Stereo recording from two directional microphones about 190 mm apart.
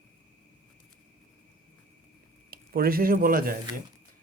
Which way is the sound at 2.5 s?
50° right (ahead or behind).